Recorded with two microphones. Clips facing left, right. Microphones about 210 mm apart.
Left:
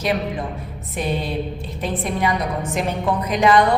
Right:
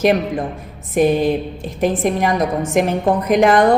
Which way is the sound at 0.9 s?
50° right (ahead or behind).